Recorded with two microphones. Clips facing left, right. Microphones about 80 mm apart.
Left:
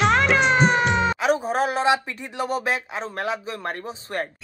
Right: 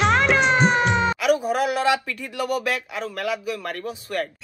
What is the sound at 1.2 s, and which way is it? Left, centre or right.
Speech, left.